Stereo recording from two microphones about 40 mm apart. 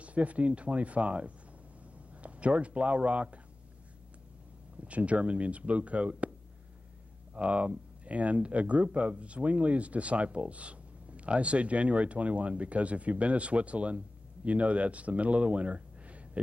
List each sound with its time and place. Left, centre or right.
0.0 s speech: right
4.8 s speech: right
7.3 s speech: right